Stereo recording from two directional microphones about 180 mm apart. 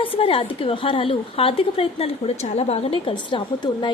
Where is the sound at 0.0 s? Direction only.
30° left (ahead or behind).